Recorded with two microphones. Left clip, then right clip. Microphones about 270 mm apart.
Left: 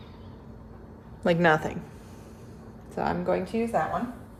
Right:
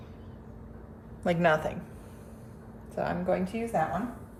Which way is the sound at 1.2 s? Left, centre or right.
Left.